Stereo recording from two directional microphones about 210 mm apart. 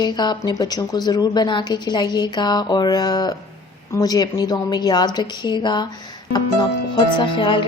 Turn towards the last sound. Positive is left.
turn(degrees=20)  # may be behind; listen again after turning